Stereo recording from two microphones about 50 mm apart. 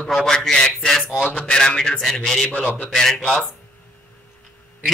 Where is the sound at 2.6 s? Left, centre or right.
Left.